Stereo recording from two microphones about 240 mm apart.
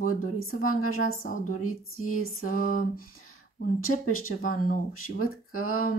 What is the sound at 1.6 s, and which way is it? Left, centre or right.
Speech, left.